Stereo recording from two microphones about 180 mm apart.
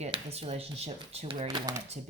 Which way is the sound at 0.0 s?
35° right (ahead or behind).